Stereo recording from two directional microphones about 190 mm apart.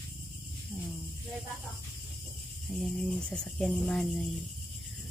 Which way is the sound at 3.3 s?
5° left (ahead or behind).